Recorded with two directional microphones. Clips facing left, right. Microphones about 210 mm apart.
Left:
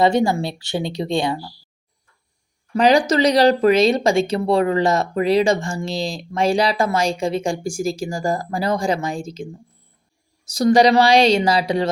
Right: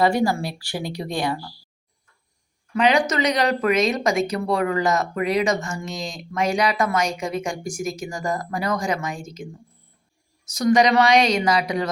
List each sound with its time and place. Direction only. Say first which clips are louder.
0.0 s speech: left 3 dB; 25° left (ahead or behind)
2.7 s speech: left 4 dB; 35° left (ahead or behind)